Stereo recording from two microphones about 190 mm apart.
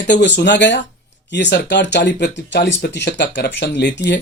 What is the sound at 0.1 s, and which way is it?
Speech, 65° left (ahead or behind).